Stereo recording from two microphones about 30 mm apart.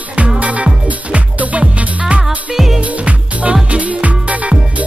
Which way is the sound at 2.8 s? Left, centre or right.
Right.